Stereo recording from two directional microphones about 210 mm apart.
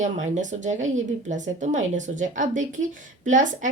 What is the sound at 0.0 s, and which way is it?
A woman's voice, 35° right (ahead or behind).